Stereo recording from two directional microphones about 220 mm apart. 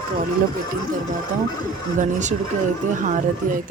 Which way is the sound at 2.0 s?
35° right (ahead or behind).